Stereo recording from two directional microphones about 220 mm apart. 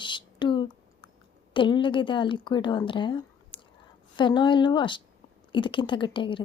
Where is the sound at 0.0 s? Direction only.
20° left (ahead or behind).